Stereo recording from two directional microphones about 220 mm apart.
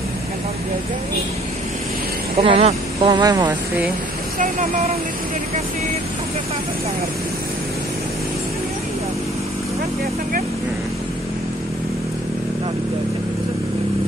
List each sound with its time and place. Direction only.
2.3 s speech: 25° right (ahead or behind)
4.4 s speech: 35° right (ahead or behind)